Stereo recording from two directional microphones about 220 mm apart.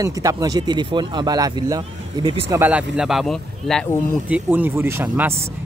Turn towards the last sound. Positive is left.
turn(degrees=-10)  # may be behind; listen again after turning